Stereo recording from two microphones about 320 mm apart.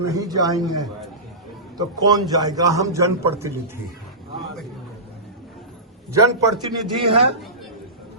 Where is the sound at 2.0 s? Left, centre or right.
Centre.